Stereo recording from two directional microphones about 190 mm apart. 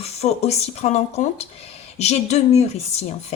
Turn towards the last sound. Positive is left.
turn(degrees=35)  # may be behind; listen again after turning